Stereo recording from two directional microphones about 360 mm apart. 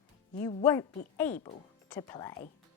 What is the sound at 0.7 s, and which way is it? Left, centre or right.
A woman's voice, centre.